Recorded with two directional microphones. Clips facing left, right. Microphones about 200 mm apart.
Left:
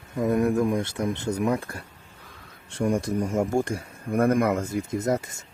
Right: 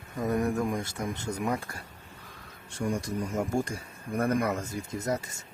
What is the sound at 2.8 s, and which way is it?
Speech, 55° left (ahead or behind).